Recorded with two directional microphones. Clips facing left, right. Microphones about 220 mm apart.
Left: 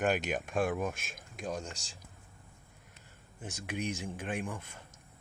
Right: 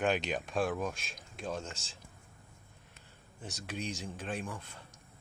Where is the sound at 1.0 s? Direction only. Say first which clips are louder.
Left 1 dB; 50° left (ahead or behind).